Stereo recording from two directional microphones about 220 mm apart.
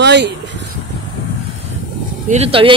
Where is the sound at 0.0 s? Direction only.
50° right (ahead or behind).